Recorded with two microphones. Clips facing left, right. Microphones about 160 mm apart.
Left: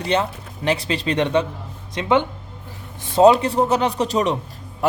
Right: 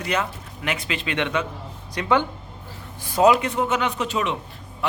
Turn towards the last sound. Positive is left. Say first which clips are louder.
# left 5 dB
turn(degrees=35)  # may be behind; listen again after turning